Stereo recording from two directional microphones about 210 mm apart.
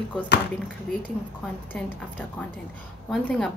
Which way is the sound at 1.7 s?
10° left (ahead or behind).